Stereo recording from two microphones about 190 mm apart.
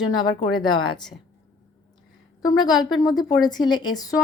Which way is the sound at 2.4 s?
20° left (ahead or behind).